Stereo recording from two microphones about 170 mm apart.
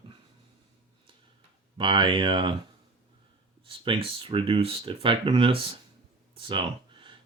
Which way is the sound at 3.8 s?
30° right (ahead or behind).